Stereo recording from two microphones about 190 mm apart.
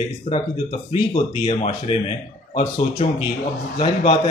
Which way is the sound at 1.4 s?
30° left (ahead or behind).